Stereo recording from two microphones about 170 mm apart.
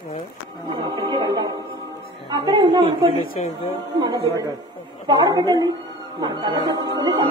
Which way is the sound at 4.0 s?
20° right (ahead or behind).